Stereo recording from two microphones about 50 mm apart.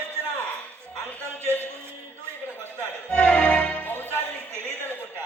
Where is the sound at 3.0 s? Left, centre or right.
Centre.